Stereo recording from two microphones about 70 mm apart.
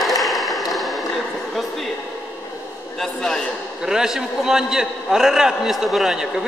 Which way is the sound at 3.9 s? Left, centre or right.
Centre.